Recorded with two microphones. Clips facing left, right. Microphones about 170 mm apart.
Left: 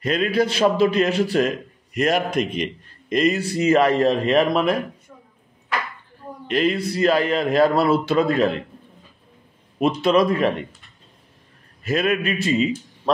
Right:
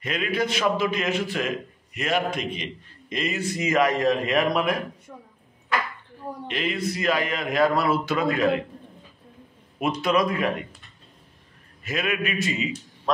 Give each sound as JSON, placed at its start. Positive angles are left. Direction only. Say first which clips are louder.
{"t": 0.0, "sound": "a man's voice", "louder": "left 6 dB", "side_deg": 35}
{"t": 6.5, "sound": "a man's voice", "louder": "left 7 dB", "side_deg": 35}
{"t": 9.8, "sound": "a man's voice", "louder": "left 5 dB", "side_deg": 30}
{"t": 11.8, "sound": "a man's voice", "louder": "left 6 dB", "side_deg": 35}